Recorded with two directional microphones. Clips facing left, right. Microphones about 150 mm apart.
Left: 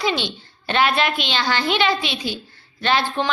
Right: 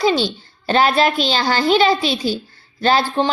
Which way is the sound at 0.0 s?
35° right (ahead or behind).